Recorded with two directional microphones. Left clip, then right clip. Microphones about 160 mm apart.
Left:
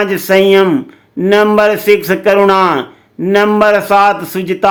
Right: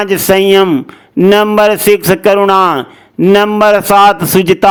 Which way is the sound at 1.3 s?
40° right (ahead or behind).